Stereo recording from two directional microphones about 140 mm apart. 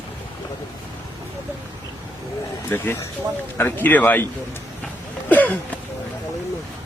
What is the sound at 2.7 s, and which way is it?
Speech, 15° left (ahead or behind).